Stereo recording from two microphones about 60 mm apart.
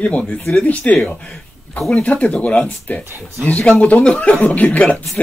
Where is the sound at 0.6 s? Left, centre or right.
Left.